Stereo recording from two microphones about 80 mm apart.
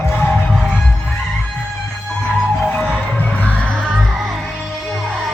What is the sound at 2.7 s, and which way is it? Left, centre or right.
Music, centre.